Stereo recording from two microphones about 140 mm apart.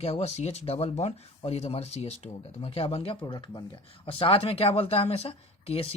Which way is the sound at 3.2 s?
30° left (ahead or behind).